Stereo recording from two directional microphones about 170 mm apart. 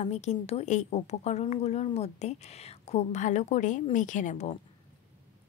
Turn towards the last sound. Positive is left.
turn(degrees=45)  # may be behind; listen again after turning